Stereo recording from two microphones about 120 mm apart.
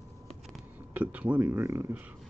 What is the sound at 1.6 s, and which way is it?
Speech, 25° right (ahead or behind).